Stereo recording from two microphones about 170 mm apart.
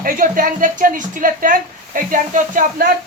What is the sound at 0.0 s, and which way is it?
A woman's voice, 55° right (ahead or behind).